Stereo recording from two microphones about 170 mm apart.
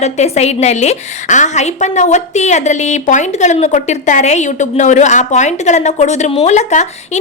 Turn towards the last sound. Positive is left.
turn(degrees=45)  # may be behind; listen again after turning